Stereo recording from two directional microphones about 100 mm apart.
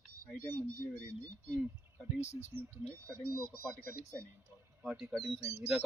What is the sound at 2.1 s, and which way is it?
Speech, 90° left.